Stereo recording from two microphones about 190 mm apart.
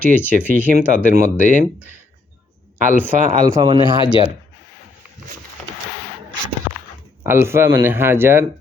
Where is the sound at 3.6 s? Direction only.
20° right (ahead or behind).